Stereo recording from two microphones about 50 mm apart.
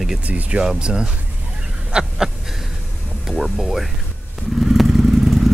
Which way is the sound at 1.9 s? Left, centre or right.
Centre.